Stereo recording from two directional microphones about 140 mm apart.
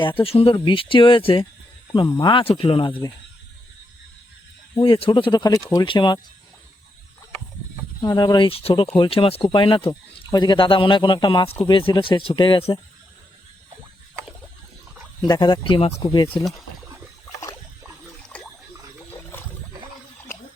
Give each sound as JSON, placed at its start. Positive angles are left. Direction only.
{"t": 0.0, "sound": "speech", "side_deg": 40}
{"t": 1.9, "sound": "speech", "side_deg": 25}
{"t": 2.3, "sound": "speech", "side_deg": 40}
{"t": 4.8, "sound": "speech", "side_deg": 40}
{"t": 8.0, "sound": "speech", "side_deg": 30}
{"t": 15.3, "sound": "speech", "side_deg": 30}
{"t": 18.2, "sound": "trickle", "side_deg": 10}